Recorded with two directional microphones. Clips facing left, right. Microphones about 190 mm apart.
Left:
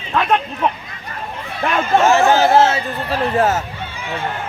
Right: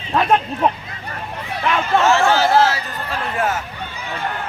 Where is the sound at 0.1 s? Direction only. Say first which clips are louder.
Right 1 dB; 30° right (ahead or behind).